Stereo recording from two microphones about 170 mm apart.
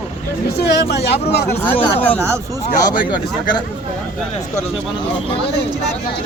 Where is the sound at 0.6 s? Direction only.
80° left.